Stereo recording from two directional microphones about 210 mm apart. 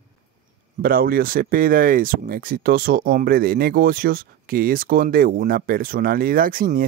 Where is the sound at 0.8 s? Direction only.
45° right (ahead or behind).